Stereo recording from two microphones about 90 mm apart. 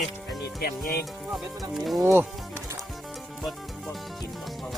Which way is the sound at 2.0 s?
25° right (ahead or behind).